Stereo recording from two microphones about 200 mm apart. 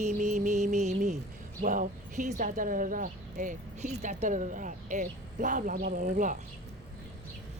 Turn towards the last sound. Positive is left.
turn(degrees=-40)  # may be behind; listen again after turning